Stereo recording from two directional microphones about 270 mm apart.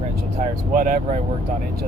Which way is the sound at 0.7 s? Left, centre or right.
Right.